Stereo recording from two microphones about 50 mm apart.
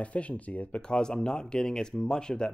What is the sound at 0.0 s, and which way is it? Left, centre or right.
Speech, left.